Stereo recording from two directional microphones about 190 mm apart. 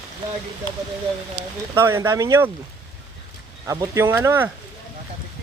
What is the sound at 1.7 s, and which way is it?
Speech, 15° right (ahead or behind).